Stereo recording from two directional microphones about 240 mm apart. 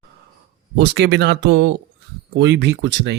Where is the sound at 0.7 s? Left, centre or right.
Right.